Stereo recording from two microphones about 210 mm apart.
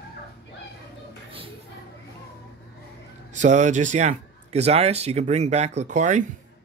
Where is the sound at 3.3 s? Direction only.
35° right (ahead or behind).